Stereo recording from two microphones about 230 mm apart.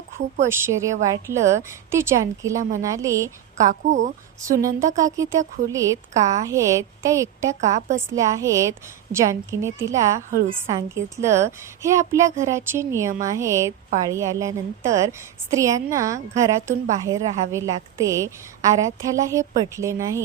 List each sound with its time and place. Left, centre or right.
0.4 s a woman's voice: centre
3.8 s a woman's voice: right
4.4 s a woman's voice: centre
7.6 s a woman's voice: right
7.9 s a woman's voice: centre